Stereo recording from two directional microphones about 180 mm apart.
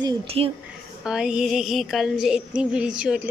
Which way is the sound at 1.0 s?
5° right (ahead or behind).